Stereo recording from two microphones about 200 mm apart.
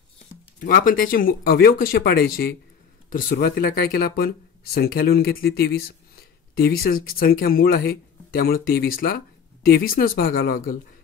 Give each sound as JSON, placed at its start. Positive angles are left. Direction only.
{"t": 0.6, "sound": "speech", "side_deg": 45}